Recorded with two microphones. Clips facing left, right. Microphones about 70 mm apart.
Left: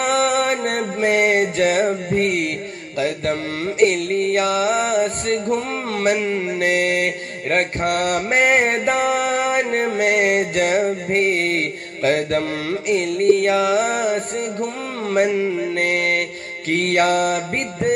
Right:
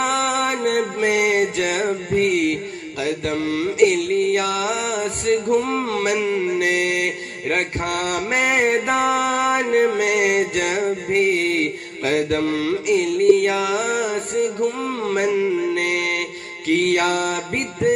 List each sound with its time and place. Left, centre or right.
0.2 s music: left
1.0 s mantra: left
9.9 s music: left
11.1 s mantra: left